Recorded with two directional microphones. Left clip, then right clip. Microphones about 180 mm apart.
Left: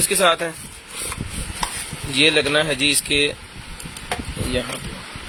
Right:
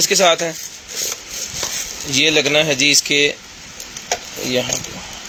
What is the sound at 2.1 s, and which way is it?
Speech, 20° right (ahead or behind).